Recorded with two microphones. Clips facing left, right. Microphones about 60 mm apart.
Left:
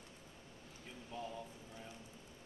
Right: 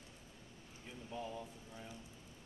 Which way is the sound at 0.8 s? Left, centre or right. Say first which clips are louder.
Right 1 dB; centre.